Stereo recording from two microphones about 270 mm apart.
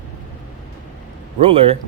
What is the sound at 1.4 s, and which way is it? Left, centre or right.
Speech, right.